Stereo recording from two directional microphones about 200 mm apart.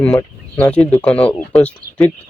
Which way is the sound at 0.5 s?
5° left (ahead or behind).